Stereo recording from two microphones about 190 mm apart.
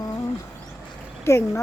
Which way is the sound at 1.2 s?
15° left (ahead or behind).